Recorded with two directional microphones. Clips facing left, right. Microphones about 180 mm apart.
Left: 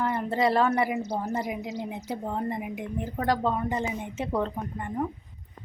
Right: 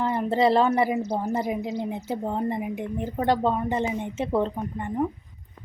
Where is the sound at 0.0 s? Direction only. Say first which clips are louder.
Right 3 dB; 20° right (ahead or behind).